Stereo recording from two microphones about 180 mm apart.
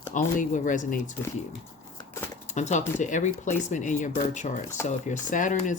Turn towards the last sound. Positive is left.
turn(degrees=45)  # may be behind; listen again after turning